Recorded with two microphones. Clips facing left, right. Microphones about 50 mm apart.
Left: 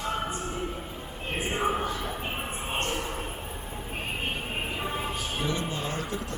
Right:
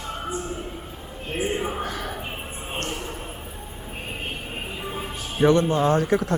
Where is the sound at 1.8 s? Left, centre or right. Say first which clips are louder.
Right 1 dB; right.